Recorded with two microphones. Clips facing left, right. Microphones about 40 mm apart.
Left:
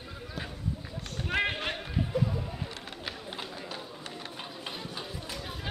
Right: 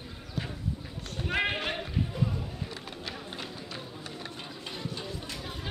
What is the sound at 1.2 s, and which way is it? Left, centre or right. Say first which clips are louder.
Run: even; centre.